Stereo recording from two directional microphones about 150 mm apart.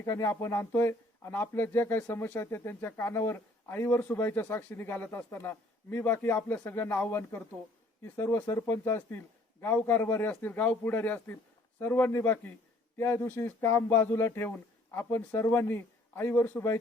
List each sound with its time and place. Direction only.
0.0 s speech: 20° left (ahead or behind)